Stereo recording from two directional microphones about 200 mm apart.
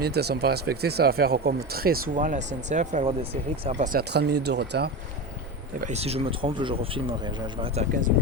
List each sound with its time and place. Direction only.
0.0 s speech: 55° right (ahead or behind); by 3.8 s 30° right (ahead or behind)
3.9 s speech: 55° right (ahead or behind)
5.8 s speech: 30° right (ahead or behind)